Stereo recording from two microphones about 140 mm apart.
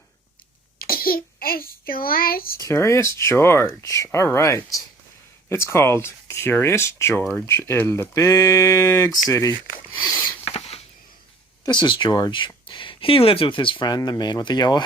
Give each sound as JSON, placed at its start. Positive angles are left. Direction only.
{"t": 0.8, "sound": "a child's voice", "side_deg": 90}
{"t": 2.6, "sound": "speech", "side_deg": 20}
{"t": 10.4, "sound": "rodents", "side_deg": 40}
{"t": 11.6, "sound": "speech", "side_deg": 30}